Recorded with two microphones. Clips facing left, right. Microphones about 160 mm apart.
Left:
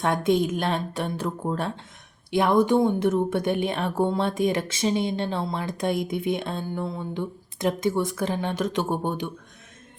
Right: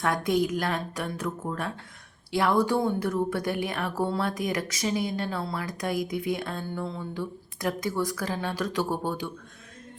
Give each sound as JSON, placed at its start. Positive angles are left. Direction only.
{"t": 0.0, "sound": "a woman's voice", "side_deg": 25}